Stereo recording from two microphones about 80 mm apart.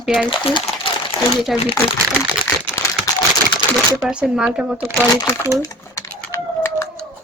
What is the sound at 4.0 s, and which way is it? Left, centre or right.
Speech, centre.